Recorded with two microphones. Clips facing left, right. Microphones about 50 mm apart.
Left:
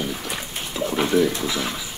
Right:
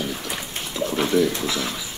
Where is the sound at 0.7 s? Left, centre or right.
Centre.